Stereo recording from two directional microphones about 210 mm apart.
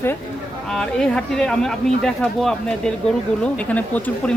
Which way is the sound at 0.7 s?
5° left (ahead or behind).